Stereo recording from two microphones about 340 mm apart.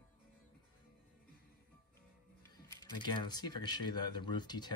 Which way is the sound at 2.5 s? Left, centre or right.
Centre.